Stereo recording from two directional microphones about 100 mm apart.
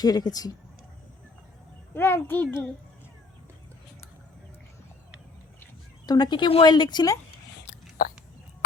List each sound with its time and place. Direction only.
0.0 s speech: 40° left (ahead or behind)
1.9 s a child's voice: 25° left (ahead or behind)
6.1 s a woman's voice: 50° left (ahead or behind)